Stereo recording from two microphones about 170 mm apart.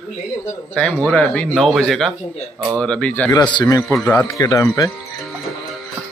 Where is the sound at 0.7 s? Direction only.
5° left (ahead or behind).